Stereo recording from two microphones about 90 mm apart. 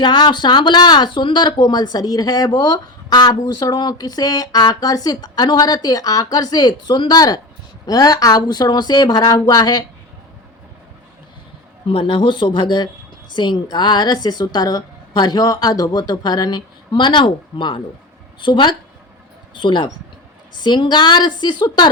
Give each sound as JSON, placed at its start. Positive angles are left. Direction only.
{"t": 0.0, "sound": "speech", "side_deg": 55}
{"t": 11.9, "sound": "a woman's voice", "side_deg": 80}